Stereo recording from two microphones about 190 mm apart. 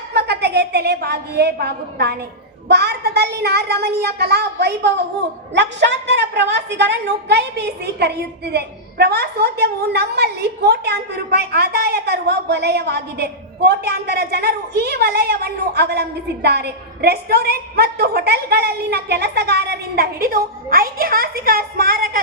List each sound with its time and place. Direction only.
0.1 s a woman's voice: 60° right (ahead or behind)